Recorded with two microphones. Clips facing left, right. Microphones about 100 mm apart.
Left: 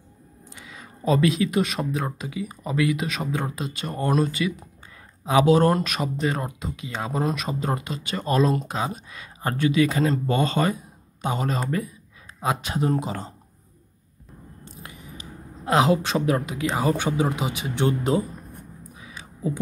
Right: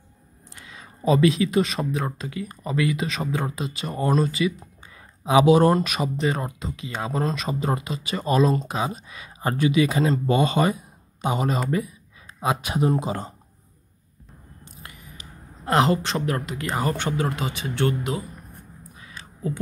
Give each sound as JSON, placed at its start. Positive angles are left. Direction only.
{"t": 0.7, "sound": "speech", "side_deg": 0}
{"t": 5.2, "sound": "speech", "side_deg": -10}
{"t": 5.8, "sound": "speech", "side_deg": 0}
{"t": 15.6, "sound": "speech", "side_deg": 5}
{"t": 18.9, "sound": "a sound", "side_deg": 10}